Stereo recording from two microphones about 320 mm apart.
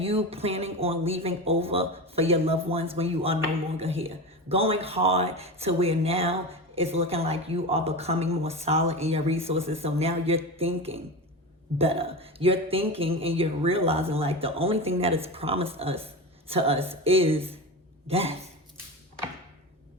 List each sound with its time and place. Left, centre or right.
0.0 s speech: centre